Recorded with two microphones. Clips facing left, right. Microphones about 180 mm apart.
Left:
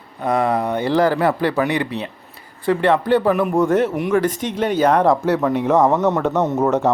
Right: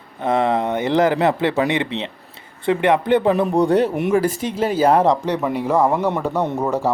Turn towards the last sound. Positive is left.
turn(degrees=5)  # may be behind; listen again after turning